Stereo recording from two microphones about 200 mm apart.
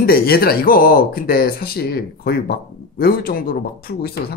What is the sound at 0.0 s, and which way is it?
Speech, 50° left (ahead or behind).